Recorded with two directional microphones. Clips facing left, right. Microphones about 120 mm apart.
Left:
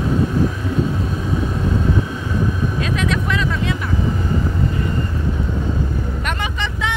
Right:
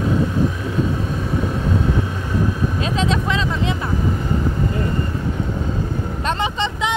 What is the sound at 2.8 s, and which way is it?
Vehicle, 25° right (ahead or behind).